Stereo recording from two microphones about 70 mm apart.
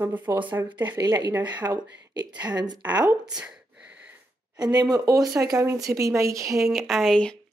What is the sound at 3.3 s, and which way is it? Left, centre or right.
Speech, centre.